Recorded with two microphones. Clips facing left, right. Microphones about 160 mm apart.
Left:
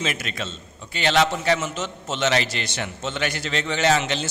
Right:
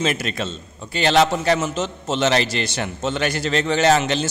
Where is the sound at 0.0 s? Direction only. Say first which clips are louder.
Right 6 dB; 35° right (ahead or behind).